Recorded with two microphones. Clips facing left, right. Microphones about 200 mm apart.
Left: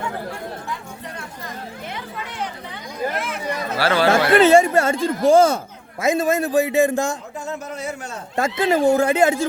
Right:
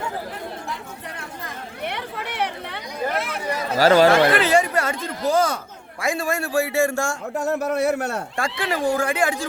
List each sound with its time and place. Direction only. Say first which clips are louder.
1.8 s chatter: right 2 dB; 70° right (ahead or behind)
3.8 s speech: right 5 dB; 40° right (ahead or behind)
4.1 s a man's voice: left 4 dB; 25° left (ahead or behind)
7.3 s a man's voice: right 8 dB; 65° right (ahead or behind)
8.4 s a man's voice: left 8 dB; 20° left (ahead or behind)